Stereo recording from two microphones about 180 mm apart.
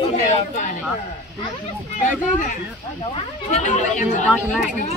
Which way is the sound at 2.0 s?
45° left (ahead or behind).